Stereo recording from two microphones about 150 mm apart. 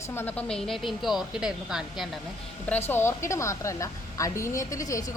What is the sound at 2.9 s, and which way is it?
A woman's voice, 15° left (ahead or behind).